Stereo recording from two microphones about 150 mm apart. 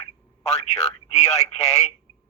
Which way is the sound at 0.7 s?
45° left (ahead or behind).